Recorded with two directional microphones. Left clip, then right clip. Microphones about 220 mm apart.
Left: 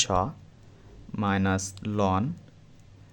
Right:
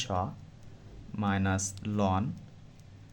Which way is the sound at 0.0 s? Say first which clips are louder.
Left 7 dB; 30° left (ahead or behind).